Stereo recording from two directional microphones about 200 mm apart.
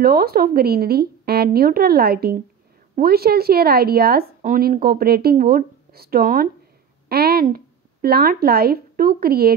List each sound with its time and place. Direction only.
0.0 s speech: 50° right (ahead or behind)